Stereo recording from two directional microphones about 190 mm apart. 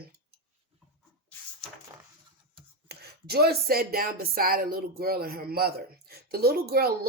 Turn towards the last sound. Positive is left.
turn(degrees=-55)  # may be behind; listen again after turning